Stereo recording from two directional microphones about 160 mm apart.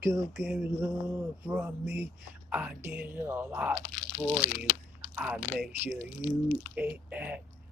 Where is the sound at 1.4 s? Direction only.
10° right (ahead or behind).